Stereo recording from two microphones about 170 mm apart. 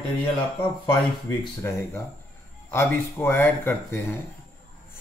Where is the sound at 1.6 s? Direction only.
15° left (ahead or behind).